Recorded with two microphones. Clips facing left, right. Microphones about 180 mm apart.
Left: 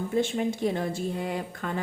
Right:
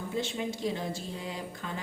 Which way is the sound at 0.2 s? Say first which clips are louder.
Left 7 dB; 55° left (ahead or behind).